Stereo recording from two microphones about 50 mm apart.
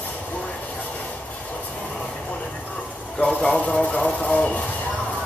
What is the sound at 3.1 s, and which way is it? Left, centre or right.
Speech, centre.